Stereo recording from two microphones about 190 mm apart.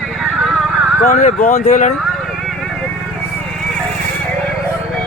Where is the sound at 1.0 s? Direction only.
40° left (ahead or behind).